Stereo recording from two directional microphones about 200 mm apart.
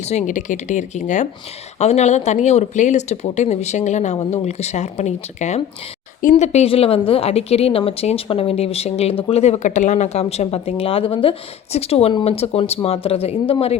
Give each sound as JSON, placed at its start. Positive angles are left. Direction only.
{"t": 0.0, "sound": "a woman's voice", "side_deg": 35}